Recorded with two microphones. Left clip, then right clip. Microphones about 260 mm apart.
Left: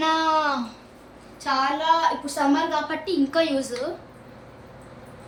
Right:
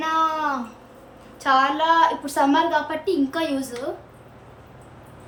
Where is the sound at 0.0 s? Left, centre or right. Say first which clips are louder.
Left 1 dB; centre.